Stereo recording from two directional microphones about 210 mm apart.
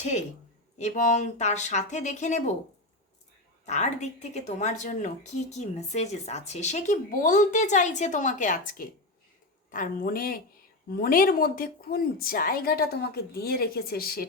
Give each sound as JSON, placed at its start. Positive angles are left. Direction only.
{"t": 0.8, "sound": "a woman's voice", "side_deg": 35}
{"t": 3.7, "sound": "a woman's voice", "side_deg": 35}